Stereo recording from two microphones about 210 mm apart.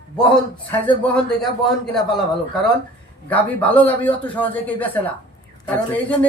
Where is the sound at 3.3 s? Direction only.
5° left (ahead or behind).